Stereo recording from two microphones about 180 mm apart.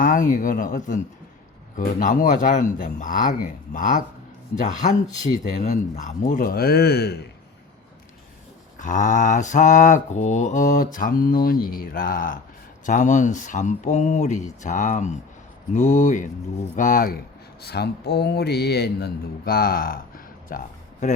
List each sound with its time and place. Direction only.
0.0 s speech: 45° left (ahead or behind); by 7.3 s 65° left (ahead or behind)
8.8 s speech: 45° left (ahead or behind)
17.6 s speech: 65° left (ahead or behind)